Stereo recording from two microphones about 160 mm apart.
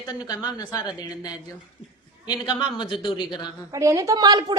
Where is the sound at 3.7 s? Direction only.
20° right (ahead or behind).